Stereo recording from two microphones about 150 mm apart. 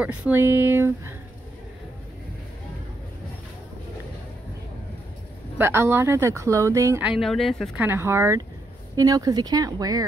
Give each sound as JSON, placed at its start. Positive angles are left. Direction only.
{"t": 0.0, "sound": "speech", "side_deg": -10}
{"t": 5.6, "sound": "speech", "side_deg": -15}
{"t": 7.0, "sound": "speech", "side_deg": -5}
{"t": 7.8, "sound": "speech", "side_deg": -15}